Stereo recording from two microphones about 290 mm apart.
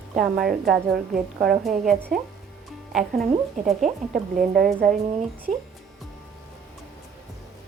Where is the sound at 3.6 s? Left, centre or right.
Right.